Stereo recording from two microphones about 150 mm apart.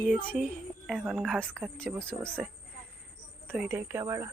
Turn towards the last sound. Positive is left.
turn(degrees=-20)  # may be behind; listen again after turning